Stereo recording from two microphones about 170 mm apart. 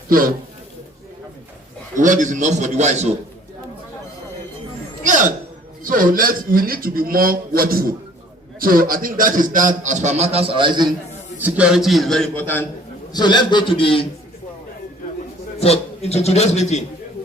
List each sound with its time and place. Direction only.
0.1 s a man's voice: 55° right (ahead or behind)
2.0 s a man's voice: 50° right (ahead or behind)
5.0 s hiccup: 50° right (ahead or behind)
5.8 s a man's voice: 55° right (ahead or behind); by 10.8 s 30° right (ahead or behind)
11.3 s a man's voice: 10° right (ahead or behind); by 12.6 s 10° left (ahead or behind)
13.1 s a man's voice: 25° left (ahead or behind)
15.6 s a man's voice: 35° left (ahead or behind)